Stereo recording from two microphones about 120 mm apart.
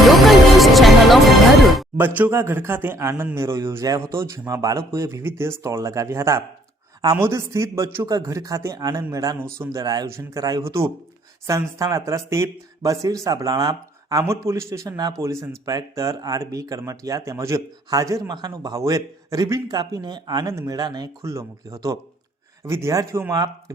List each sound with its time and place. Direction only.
0.0 s music: centre (ahead or behind)
2.0 s speech: 15° right (ahead or behind); by 23.7 s 30° right (ahead or behind)